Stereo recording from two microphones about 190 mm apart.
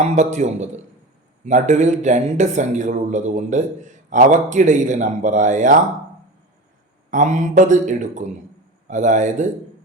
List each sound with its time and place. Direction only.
0.0 s speech: 35° right (ahead or behind)
7.1 s speech: 40° right (ahead or behind)